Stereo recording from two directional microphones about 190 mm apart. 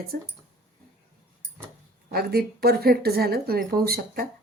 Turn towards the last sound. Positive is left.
turn(degrees=-55)  # may be behind; listen again after turning